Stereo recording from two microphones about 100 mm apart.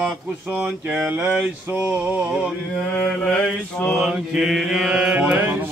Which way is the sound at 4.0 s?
5° right (ahead or behind).